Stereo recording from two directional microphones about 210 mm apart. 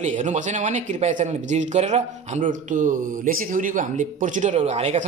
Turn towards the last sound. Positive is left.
turn(degrees=-30)  # may be behind; listen again after turning